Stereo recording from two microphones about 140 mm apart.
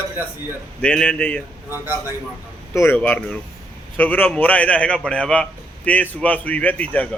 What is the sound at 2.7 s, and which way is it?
A man's voice, 15° left (ahead or behind).